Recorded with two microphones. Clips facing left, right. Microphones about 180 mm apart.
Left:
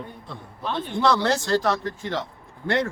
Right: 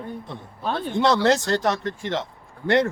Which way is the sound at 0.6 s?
40° right (ahead or behind).